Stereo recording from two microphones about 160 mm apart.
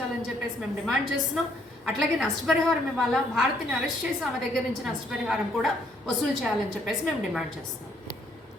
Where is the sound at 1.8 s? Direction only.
Centre (ahead or behind).